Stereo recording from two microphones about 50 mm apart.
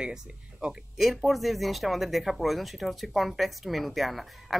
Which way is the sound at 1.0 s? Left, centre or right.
Centre.